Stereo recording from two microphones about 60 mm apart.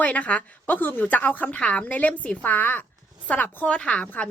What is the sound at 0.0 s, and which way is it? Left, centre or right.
Speech, left.